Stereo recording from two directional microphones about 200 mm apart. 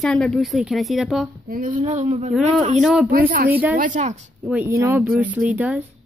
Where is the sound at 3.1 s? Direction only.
45° right (ahead or behind).